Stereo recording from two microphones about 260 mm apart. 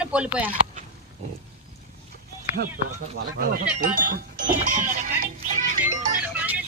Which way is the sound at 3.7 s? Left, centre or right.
Right.